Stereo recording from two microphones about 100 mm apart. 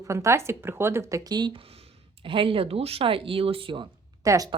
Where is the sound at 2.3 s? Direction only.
60° right (ahead or behind).